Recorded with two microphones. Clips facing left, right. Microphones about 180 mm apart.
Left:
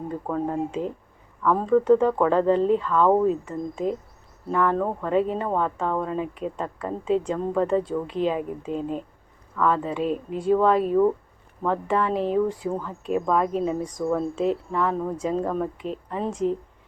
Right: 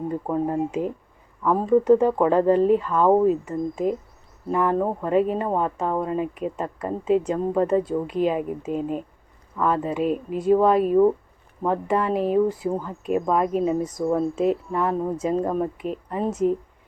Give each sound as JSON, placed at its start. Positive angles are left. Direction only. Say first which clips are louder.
{"t": 0.3, "sound": "speech", "louder": "right 1 dB", "side_deg": -10}